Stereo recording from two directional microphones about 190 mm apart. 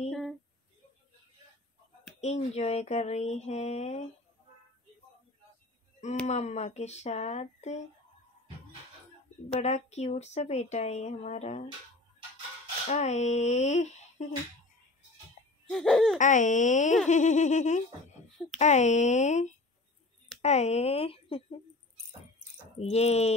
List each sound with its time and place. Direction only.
0.1 s a sound: centre (ahead or behind)
2.1 s speech: 35° left (ahead or behind)
6.2 s speech: 35° left (ahead or behind)
9.5 s speech: 35° left (ahead or behind)
12.8 s speech: 35° left (ahead or behind)
15.7 s laughter: centre (ahead or behind)
16.2 s speech: 40° left (ahead or behind)
22.8 s speech: 35° left (ahead or behind)